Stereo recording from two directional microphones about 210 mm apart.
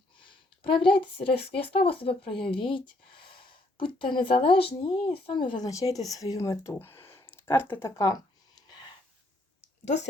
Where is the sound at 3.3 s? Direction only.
25° left (ahead or behind).